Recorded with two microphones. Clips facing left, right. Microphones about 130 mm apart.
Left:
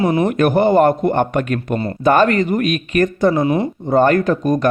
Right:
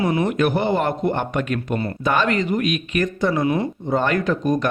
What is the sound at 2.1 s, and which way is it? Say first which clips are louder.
Speech: left 7 dB; 50° left (ahead or behind).